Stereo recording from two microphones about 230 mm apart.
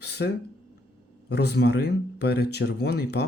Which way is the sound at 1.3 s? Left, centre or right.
Left.